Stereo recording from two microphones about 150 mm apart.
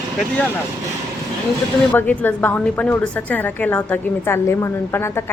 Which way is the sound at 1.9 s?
10° left (ahead or behind).